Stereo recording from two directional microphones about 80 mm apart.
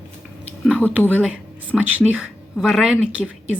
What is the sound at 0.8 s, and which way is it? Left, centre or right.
Speech, centre.